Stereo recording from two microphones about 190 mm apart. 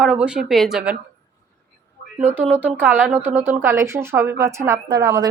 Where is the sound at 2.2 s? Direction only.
10° right (ahead or behind).